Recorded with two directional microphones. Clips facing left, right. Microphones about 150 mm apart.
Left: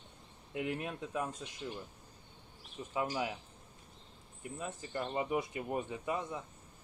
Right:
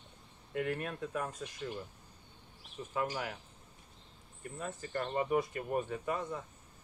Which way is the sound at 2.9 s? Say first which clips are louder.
Left 1 dB; 15° left (ahead or behind).